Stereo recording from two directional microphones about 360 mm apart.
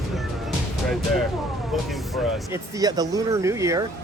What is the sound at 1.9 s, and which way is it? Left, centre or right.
Speech, centre.